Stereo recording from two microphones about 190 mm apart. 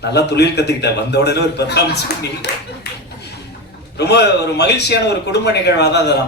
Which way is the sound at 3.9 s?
60° left (ahead or behind).